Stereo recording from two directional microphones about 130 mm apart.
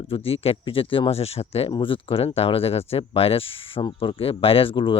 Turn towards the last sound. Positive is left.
turn(degrees=45)  # may be behind; listen again after turning